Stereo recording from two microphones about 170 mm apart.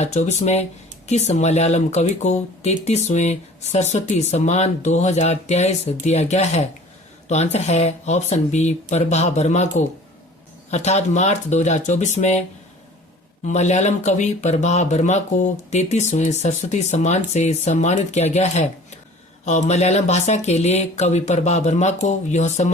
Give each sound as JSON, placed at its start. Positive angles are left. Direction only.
{"t": 0.0, "sound": "speech", "side_deg": 45}
{"t": 13.4, "sound": "speech", "side_deg": 45}